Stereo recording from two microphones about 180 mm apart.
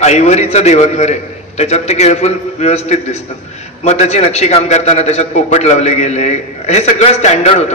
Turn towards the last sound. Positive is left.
turn(degrees=35)  # may be behind; listen again after turning